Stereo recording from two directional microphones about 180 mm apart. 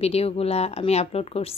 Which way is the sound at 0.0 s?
35° left (ahead or behind).